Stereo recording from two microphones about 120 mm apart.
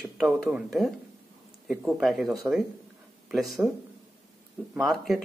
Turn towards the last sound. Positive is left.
turn(degrees=0)  # may be behind; listen again after turning